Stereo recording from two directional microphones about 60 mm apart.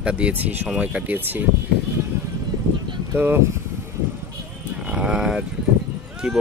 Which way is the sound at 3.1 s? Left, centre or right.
Right.